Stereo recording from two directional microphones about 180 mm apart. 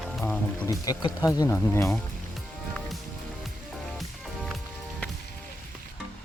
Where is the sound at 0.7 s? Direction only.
20° left (ahead or behind).